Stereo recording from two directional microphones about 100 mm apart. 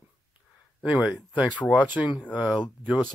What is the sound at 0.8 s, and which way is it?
Speech, 10° right (ahead or behind).